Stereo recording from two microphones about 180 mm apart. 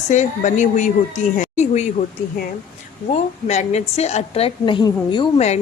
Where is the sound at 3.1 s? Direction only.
40° left (ahead or behind).